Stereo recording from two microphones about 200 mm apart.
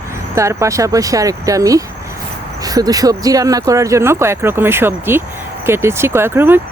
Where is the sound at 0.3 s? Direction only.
15° right (ahead or behind).